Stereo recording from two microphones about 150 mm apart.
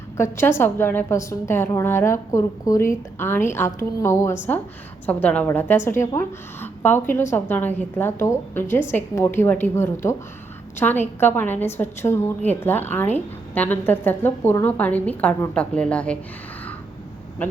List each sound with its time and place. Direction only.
0.2 s a woman's voice: 15° left (ahead or behind)
17.4 s speech: 10° left (ahead or behind)